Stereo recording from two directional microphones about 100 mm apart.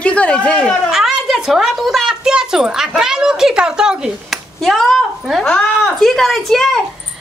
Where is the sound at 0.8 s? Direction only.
Centre (ahead or behind).